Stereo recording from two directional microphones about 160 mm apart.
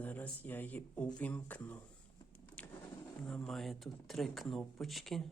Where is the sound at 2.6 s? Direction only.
5° left (ahead or behind).